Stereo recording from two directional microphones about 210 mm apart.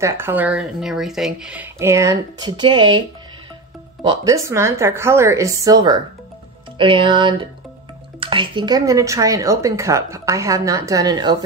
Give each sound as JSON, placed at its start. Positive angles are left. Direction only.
{"t": 0.0, "sound": "speech", "side_deg": -10}
{"t": 4.0, "sound": "speech", "side_deg": -20}